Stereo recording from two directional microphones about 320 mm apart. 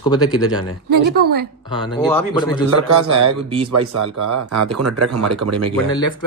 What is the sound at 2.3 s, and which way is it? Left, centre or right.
Speech, centre.